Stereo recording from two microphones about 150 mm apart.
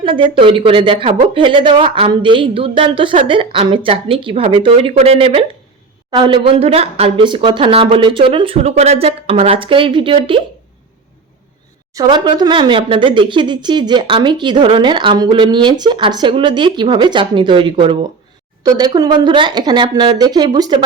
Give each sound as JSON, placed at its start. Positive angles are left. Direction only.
{"t": 0.0, "sound": "speech", "side_deg": -35}
{"t": 11.9, "sound": "speech", "side_deg": -30}